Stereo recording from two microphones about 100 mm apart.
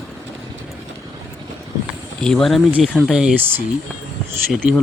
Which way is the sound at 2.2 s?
5° left (ahead or behind).